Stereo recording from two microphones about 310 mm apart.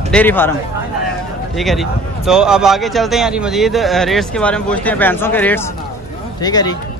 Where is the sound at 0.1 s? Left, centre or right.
Centre.